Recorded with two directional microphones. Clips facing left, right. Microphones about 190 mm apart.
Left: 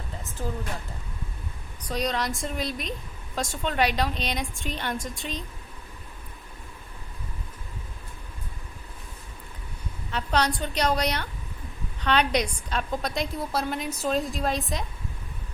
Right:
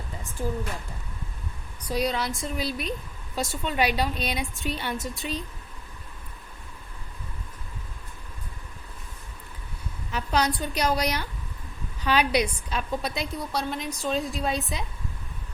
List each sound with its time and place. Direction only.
1.9 s a woman's voice: 5° right (ahead or behind)
10.1 s a woman's voice: 10° right (ahead or behind)